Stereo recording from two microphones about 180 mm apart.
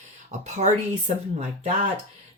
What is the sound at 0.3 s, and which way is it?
Speech, 40° right (ahead or behind).